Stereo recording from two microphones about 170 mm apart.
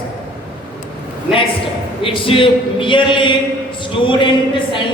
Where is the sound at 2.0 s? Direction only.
30° left (ahead or behind).